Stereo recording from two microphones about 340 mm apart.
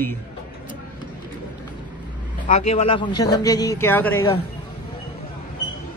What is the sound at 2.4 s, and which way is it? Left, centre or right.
Speech, centre.